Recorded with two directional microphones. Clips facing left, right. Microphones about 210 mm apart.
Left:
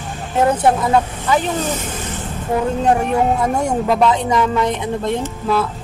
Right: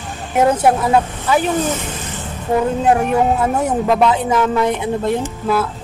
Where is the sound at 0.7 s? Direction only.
10° right (ahead or behind).